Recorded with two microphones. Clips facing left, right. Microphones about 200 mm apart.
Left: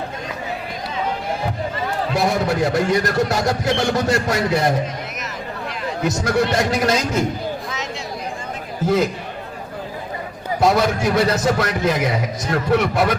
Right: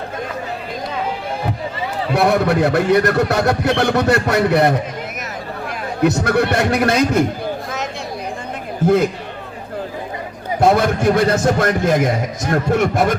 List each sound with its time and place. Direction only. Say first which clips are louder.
2.1 s a man's voice: right 5 dB; 60° right (ahead or behind)
10.6 s a man's voice: right 3 dB; 55° right (ahead or behind)